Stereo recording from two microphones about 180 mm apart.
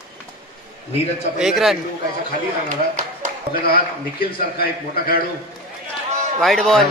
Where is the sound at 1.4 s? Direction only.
Centre (ahead or behind).